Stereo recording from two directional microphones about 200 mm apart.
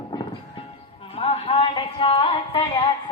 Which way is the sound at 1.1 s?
30° left (ahead or behind).